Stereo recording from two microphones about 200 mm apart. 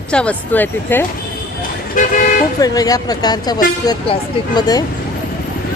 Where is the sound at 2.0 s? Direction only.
40° left (ahead or behind).